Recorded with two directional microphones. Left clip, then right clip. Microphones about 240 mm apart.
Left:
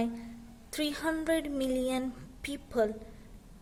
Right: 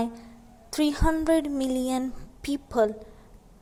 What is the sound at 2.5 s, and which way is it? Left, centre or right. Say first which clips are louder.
Speech: right 6 dB; centre.